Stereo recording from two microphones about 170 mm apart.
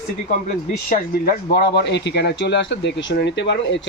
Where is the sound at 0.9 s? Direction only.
55° left (ahead or behind).